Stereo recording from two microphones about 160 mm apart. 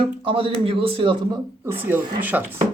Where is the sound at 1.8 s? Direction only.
10° right (ahead or behind).